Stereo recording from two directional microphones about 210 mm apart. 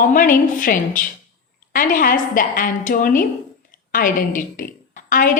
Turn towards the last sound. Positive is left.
turn(degrees=40)  # may be behind; listen again after turning